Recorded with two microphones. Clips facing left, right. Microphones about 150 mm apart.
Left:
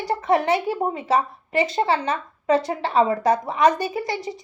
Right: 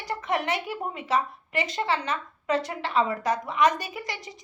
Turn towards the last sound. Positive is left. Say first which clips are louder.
# left 10 dB
turn(degrees=30)  # may be behind; listen again after turning